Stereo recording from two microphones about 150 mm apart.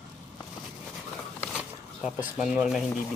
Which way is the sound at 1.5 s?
5° right (ahead or behind).